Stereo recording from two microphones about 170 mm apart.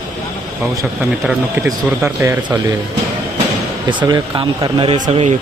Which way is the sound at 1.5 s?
15° right (ahead or behind).